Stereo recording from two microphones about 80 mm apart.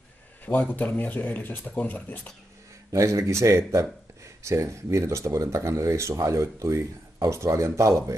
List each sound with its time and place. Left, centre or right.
0.5 s speech: centre
2.9 s speech: right